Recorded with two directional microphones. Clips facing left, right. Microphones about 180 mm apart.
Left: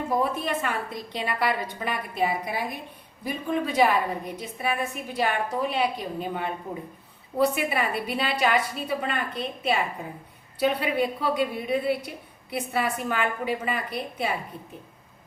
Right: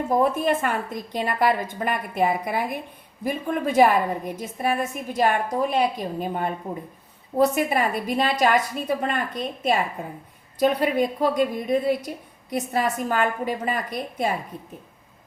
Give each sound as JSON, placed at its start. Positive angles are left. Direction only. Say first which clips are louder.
{"t": 0.2, "sound": "a woman's voice", "louder": "right 5 dB", "side_deg": -50}